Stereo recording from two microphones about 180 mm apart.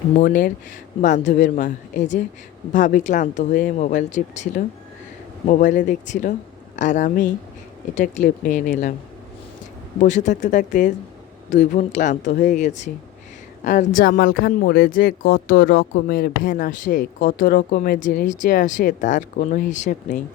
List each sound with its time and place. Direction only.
0.2 s speech: 45° left (ahead or behind)
10.0 s speech: 40° left (ahead or behind)